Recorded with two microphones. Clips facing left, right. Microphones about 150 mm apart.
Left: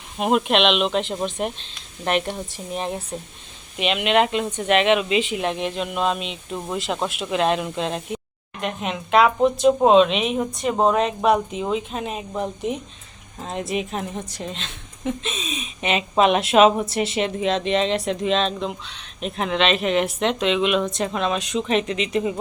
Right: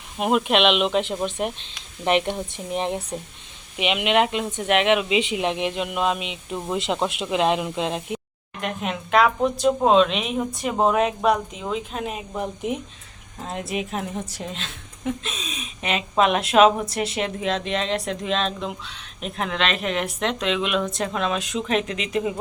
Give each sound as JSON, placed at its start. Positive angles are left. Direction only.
{"t": 0.2, "sound": "a woman's voice", "side_deg": 0}
{"t": 2.0, "sound": "speech", "side_deg": -20}
{"t": 6.7, "sound": "speech", "side_deg": -20}
{"t": 8.6, "sound": "a woman's voice", "side_deg": 0}